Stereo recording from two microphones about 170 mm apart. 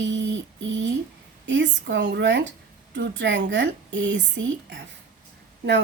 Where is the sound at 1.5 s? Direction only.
90° right.